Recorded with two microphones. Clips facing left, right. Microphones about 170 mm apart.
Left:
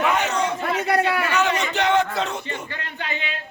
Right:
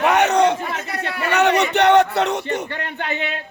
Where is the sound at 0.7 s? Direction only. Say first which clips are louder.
Left 6 dB; 65° left (ahead or behind).